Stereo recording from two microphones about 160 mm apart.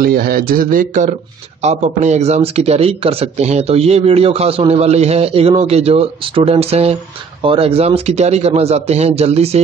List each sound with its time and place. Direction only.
0.0 s speech: 65° right (ahead or behind)
1.6 s a man's voice: 45° right (ahead or behind)